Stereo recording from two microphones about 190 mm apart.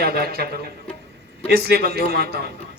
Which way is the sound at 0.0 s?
55° right (ahead or behind).